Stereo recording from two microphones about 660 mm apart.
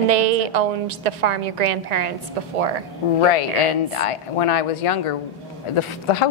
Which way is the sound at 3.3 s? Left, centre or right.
Left.